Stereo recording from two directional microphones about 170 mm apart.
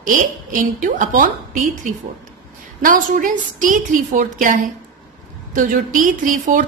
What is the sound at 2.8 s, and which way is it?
A woman's voice, 50° right (ahead or behind).